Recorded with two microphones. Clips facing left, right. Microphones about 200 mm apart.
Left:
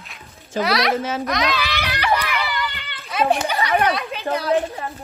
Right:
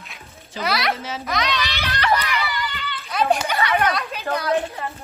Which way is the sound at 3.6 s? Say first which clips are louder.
Left 2 dB; 35° left (ahead or behind).